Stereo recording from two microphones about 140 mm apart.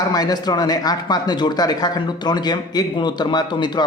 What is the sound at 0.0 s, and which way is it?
Speech, 30° left (ahead or behind).